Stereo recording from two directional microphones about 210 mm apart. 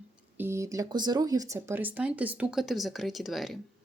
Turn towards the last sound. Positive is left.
turn(degrees=0)  # may be behind; listen again after turning